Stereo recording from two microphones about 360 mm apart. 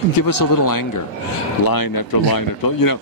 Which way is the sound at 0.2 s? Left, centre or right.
Left.